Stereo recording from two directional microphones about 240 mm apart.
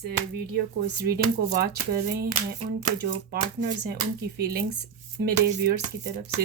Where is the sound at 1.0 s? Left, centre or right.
Right.